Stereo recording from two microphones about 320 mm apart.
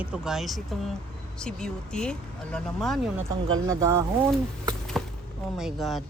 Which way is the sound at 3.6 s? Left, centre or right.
Centre.